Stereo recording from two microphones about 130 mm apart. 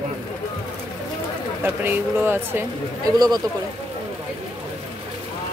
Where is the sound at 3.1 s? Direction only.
30° right (ahead or behind).